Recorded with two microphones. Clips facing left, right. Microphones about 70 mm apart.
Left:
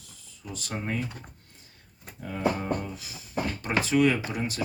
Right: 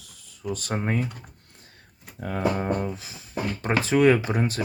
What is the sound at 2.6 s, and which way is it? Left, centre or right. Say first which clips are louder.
Speech: right 4 dB; right.